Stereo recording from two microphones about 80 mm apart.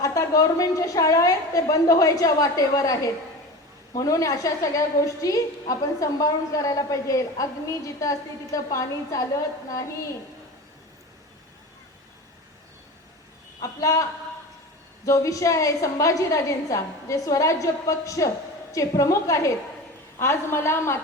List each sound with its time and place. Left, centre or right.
0.0 s a woman's voice: left
13.6 s a woman's voice: left